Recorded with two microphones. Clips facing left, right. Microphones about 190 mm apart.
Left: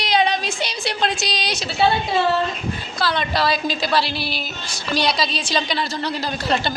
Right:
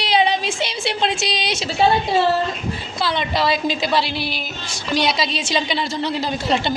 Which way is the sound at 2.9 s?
20° right (ahead or behind).